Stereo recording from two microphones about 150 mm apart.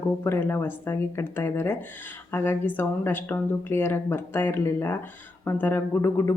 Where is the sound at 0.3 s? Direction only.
15° left (ahead or behind).